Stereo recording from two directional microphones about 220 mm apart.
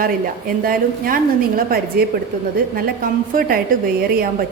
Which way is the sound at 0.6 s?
40° right (ahead or behind).